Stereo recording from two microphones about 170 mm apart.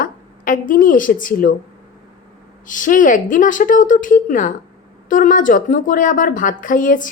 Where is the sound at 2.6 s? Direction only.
50° left (ahead or behind).